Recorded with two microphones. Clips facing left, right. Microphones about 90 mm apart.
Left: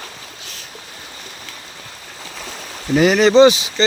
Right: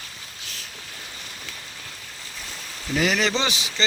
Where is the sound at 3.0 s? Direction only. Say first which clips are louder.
Left 13 dB; 25° left (ahead or behind).